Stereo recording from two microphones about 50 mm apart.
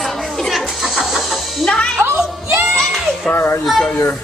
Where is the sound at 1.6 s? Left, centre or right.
Centre.